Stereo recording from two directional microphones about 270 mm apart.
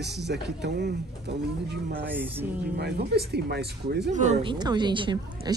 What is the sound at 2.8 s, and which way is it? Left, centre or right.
Speech, right.